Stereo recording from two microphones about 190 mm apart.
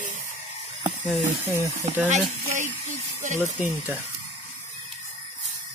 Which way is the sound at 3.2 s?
40° right (ahead or behind).